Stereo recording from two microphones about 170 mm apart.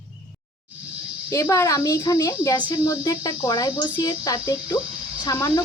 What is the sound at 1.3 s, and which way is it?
Speech, 15° left (ahead or behind).